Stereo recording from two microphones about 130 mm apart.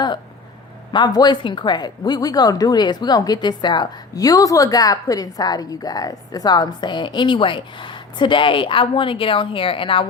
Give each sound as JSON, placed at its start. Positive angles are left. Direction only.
{"t": 0.9, "sound": "speech", "side_deg": 35}